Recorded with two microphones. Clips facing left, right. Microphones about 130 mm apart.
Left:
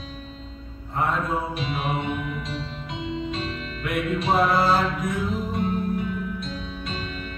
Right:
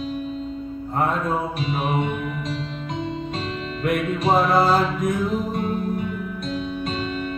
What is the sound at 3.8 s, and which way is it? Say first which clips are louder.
Music: right 4 dB; 45° right (ahead or behind).